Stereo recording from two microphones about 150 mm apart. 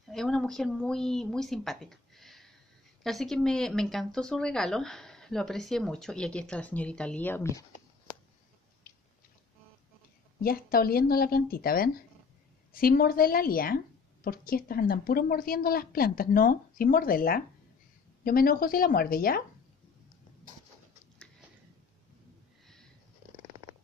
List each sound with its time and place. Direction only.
0.1 s a woman's voice: 5° left (ahead or behind)
8.8 s biting: 70° left (ahead or behind)
10.4 s a woman's voice: 80° left